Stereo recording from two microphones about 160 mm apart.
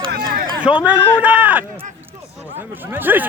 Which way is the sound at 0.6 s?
10° right (ahead or behind).